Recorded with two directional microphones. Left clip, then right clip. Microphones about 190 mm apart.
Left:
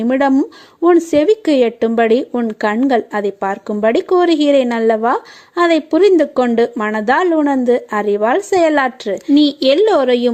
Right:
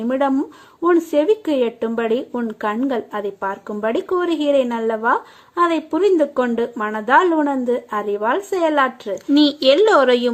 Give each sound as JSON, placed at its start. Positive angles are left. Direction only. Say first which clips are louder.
{"t": 0.1, "sound": "a woman's voice", "louder": "left 5 dB", "side_deg": 35}